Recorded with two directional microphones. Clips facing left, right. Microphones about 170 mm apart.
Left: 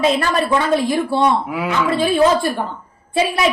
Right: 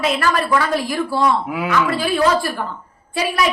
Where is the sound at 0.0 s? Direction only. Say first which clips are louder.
Left 2 dB; 25° left (ahead or behind).